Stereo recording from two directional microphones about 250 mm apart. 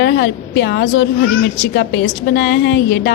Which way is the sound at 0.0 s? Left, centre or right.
Left.